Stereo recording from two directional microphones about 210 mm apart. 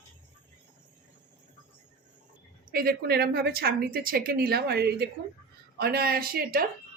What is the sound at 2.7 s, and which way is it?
Speech, 45° right (ahead or behind).